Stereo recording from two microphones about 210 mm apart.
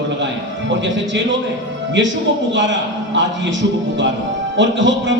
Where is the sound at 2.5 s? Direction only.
60° right (ahead or behind).